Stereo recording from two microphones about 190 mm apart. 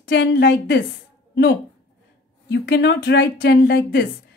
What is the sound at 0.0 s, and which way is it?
A woman's voice, 65° left (ahead or behind).